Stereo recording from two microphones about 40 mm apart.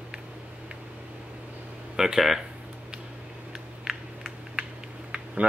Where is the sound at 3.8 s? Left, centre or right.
Centre.